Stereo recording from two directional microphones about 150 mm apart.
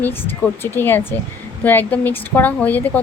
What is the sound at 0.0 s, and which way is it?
Speech, 15° left (ahead or behind).